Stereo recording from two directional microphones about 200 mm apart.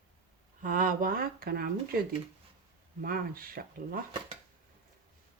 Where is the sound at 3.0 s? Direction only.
45° right (ahead or behind).